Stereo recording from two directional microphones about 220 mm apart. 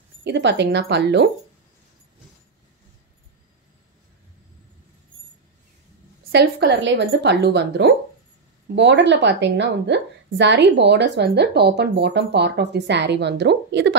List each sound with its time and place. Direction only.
0.2 s a woman's voice: 55° right (ahead or behind)
6.3 s a woman's voice: 50° right (ahead or behind)